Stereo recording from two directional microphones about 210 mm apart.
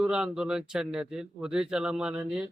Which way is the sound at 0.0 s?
5° right (ahead or behind).